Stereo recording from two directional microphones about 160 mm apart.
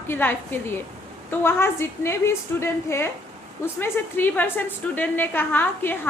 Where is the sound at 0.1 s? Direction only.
15° left (ahead or behind).